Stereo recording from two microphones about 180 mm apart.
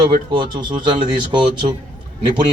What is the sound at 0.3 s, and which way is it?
Speech, 25° right (ahead or behind).